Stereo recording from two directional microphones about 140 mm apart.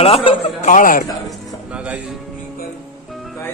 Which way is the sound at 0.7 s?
75° left (ahead or behind).